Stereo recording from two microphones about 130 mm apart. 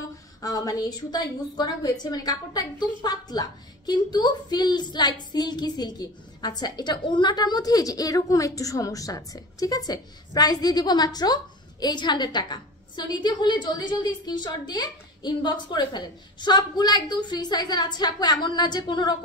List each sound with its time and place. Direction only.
0.4 s a woman's voice: 25° left (ahead or behind)